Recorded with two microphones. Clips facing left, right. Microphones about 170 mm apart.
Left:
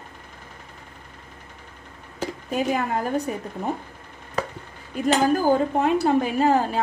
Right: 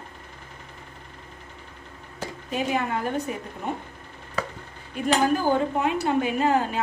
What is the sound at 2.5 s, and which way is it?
Speech, 40° left (ahead or behind).